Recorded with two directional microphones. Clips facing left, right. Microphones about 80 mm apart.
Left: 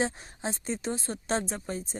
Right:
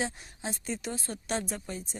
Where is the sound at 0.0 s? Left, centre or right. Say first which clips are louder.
Left 4 dB; left.